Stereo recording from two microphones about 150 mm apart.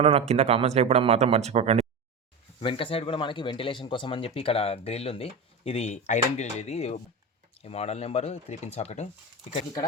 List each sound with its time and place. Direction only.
0.0 s speech: 45° right (ahead or behind)
2.6 s speech: 35° left (ahead or behind)